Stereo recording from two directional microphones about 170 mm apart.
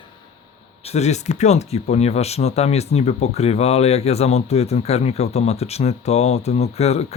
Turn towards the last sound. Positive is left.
turn(degrees=40)  # may be behind; listen again after turning